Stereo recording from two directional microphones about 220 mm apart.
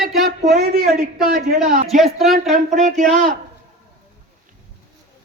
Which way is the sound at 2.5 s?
35° right (ahead or behind).